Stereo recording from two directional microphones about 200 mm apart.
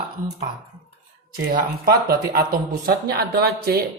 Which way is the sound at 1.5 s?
45° right (ahead or behind).